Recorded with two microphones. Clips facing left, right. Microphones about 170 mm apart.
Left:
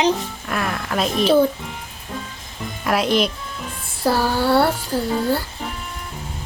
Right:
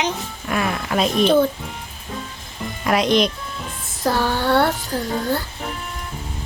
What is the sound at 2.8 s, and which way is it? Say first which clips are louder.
Speech: right 1 dB; 5° left (ahead or behind).